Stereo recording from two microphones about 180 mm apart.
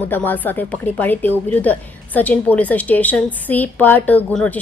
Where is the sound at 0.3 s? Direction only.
10° left (ahead or behind).